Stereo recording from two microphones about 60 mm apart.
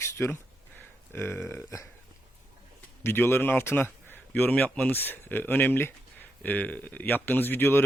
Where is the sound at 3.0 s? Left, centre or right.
Left.